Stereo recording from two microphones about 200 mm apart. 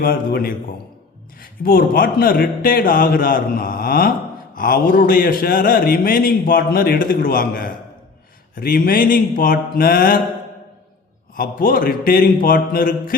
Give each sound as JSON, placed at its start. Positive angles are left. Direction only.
{"t": 0.0, "sound": "speech", "side_deg": 45}
{"t": 11.3, "sound": "speech", "side_deg": 45}